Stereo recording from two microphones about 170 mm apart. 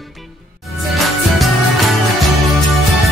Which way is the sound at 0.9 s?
Centre (ahead or behind).